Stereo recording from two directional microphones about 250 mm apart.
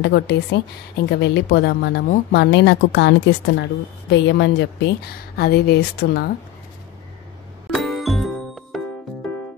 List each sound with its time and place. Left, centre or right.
0.0 s a woman's voice: left
7.7 s music: centre